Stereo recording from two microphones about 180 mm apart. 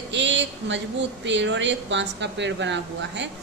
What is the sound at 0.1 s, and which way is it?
A woman's voice, 85° right.